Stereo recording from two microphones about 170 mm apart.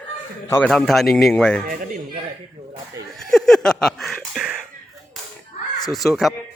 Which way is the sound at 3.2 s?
Centre (ahead or behind).